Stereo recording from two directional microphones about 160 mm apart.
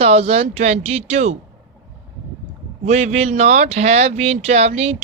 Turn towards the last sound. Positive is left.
turn(degrees=-40)  # may be behind; listen again after turning